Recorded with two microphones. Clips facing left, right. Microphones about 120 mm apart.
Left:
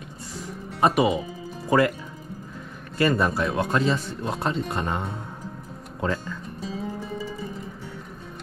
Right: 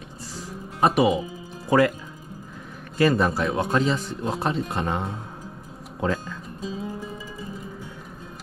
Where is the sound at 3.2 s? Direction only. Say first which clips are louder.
Even; 25° right (ahead or behind).